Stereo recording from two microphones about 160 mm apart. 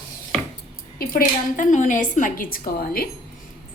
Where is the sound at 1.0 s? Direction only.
60° left (ahead or behind).